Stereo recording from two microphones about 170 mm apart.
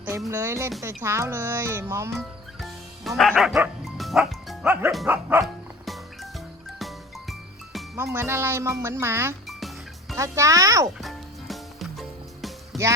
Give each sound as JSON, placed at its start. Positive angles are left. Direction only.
{"t": 0.3, "sound": "speech", "side_deg": -15}
{"t": 2.6, "sound": "music", "side_deg": 0}
{"t": 5.0, "sound": "speech", "side_deg": -10}
{"t": 5.4, "sound": "dog", "side_deg": 0}
{"t": 7.9, "sound": "speech", "side_deg": -15}
{"t": 9.5, "sound": "music", "side_deg": 0}
{"t": 10.2, "sound": "speech", "side_deg": -20}
{"t": 10.9, "sound": "music", "side_deg": 0}